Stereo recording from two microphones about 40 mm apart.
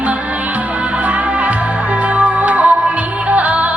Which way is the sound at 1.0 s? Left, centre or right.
Right.